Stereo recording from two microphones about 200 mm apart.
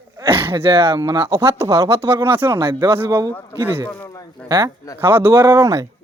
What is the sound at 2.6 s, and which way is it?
Speech, 25° right (ahead or behind).